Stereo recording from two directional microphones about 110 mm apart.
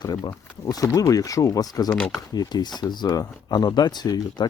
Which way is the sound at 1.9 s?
5° left (ahead or behind).